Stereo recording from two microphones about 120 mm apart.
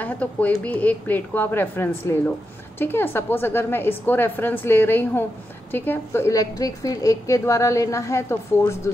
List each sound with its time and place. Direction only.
0.0 s a woman's voice: 10° left (ahead or behind)